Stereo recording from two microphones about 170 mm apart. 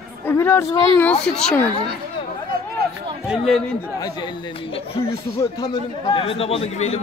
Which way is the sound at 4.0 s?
25° left (ahead or behind).